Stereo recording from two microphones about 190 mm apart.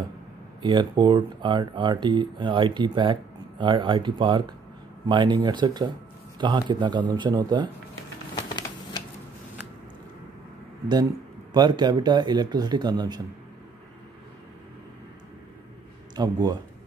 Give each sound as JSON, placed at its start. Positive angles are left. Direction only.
{"t": 0.6, "sound": "speech", "side_deg": -25}
{"t": 8.4, "sound": "shuffling cards", "side_deg": 20}
{"t": 11.5, "sound": "speech", "side_deg": -20}
{"t": 16.2, "sound": "speech", "side_deg": -20}